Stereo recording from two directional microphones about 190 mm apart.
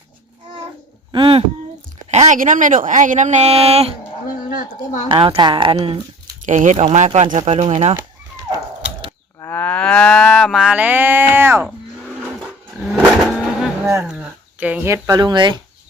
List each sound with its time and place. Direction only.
1.1 s a sound: 30° right (ahead or behind)
2.0 s a woman's voice: 35° right (ahead or behind)
4.4 s speech: 45° left (ahead or behind)
5.0 s a woman's voice: 25° right (ahead or behind)
6.4 s a woman's voice: 40° right (ahead or behind)
9.4 s livestock: 10° left (ahead or behind); by 11.7 s 10° right (ahead or behind)
12.8 s vehicle: 5° right (ahead or behind)
13.8 s a sound: 15° right (ahead or behind)
14.1 s speech: 5° right (ahead or behind); by 15.6 s 25° right (ahead or behind)